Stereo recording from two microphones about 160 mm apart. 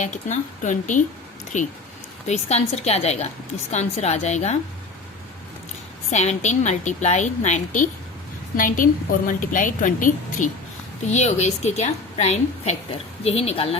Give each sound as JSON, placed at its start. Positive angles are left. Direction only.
{"t": 0.0, "sound": "a woman's voice", "side_deg": 50}
{"t": 2.2, "sound": "a woman's voice", "side_deg": 40}
{"t": 6.1, "sound": "a woman's voice", "side_deg": 45}
{"t": 11.1, "sound": "a woman's voice", "side_deg": 45}